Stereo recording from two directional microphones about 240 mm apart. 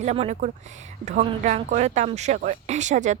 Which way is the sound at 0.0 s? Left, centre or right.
Right.